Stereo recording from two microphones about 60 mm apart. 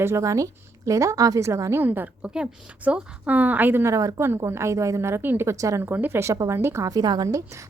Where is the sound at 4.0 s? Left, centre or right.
Right.